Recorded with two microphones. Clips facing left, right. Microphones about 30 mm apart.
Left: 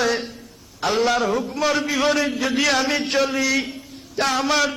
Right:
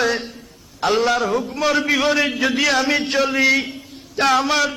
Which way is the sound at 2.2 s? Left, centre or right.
Right.